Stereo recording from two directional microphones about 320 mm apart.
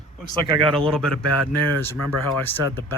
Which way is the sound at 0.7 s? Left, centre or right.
Centre.